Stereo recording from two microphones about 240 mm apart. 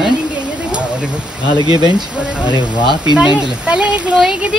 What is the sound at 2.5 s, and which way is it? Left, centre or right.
Speech, centre.